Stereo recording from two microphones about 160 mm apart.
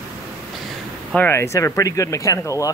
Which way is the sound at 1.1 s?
15° left (ahead or behind).